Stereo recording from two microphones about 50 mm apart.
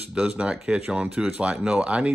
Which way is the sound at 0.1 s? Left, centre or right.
Right.